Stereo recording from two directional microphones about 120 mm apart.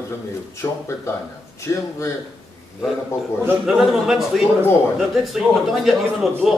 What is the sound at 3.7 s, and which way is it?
A man's voice, centre (ahead or behind).